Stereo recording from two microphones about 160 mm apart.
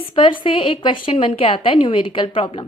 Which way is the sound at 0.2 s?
35° left (ahead or behind).